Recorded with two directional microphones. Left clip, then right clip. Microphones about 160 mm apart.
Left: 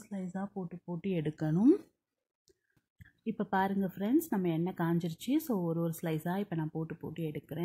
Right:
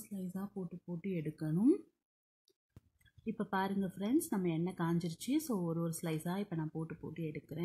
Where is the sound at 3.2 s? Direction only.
20° left (ahead or behind).